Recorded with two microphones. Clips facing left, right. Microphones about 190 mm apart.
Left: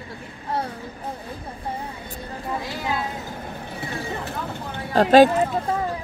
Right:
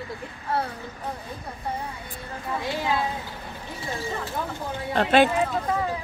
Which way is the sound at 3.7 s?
60° left (ahead or behind).